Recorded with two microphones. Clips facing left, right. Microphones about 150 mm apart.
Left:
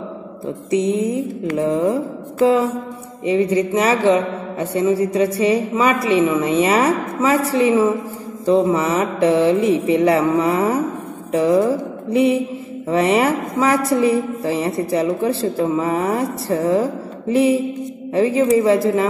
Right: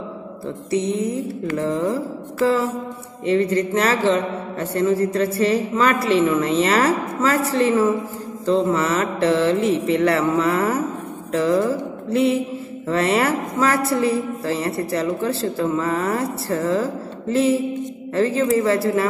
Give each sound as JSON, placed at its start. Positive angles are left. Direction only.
{"t": 0.7, "sound": "a sound", "side_deg": 20}
{"t": 1.6, "sound": "a woman's voice", "side_deg": 20}
{"t": 3.3, "sound": "a woman's voice", "side_deg": 10}
{"t": 12.8, "sound": "a woman's voice", "side_deg": 15}